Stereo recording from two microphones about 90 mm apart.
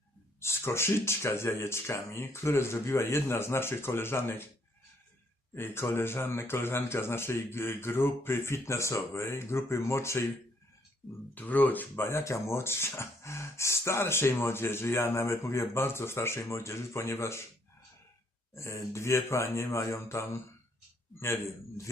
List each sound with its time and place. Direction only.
0.3 s speech: 30° left (ahead or behind)
5.5 s speech: 25° left (ahead or behind)
11.3 s speech: 20° left (ahead or behind)
18.5 s speech: 30° left (ahead or behind)